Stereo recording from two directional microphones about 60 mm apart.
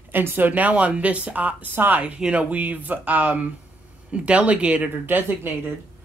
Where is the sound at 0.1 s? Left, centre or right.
Right.